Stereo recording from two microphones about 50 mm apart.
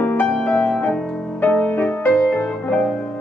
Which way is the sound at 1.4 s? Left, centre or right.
Left.